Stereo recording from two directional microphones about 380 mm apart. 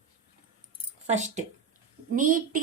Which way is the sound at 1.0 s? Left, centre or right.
Centre.